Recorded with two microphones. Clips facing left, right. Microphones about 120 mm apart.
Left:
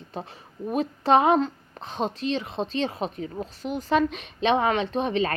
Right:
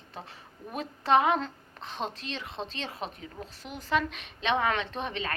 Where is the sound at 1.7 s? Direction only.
45° left (ahead or behind).